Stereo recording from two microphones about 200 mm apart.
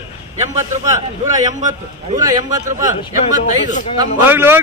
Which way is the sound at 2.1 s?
20° right (ahead or behind).